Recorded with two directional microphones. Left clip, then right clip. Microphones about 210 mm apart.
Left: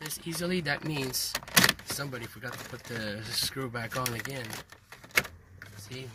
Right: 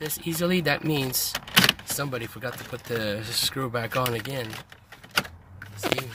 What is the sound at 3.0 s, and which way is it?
Speech, 15° right (ahead or behind).